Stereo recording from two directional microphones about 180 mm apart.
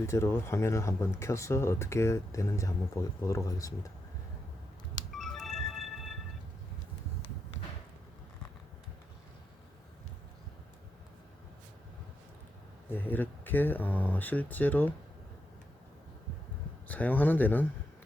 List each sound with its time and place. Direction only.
0.0 s speech: 15° left (ahead or behind)
5.1 s music: centre (ahead or behind)
12.9 s speech: 10° left (ahead or behind)
16.9 s speech: 10° left (ahead or behind)